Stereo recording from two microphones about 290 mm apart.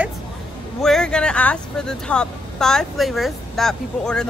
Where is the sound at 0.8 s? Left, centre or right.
Centre.